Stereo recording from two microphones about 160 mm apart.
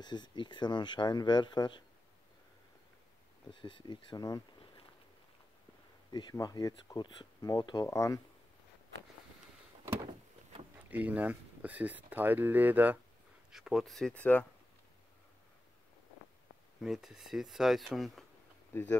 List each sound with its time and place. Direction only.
0.0 s speech: 25° left (ahead or behind)
3.6 s speech: 30° left (ahead or behind)
6.1 s speech: 25° left (ahead or behind)
10.9 s speech: 10° right (ahead or behind); by 14.4 s 10° left (ahead or behind)
16.8 s speech: 5° right (ahead or behind)
18.7 s speech: 15° left (ahead or behind)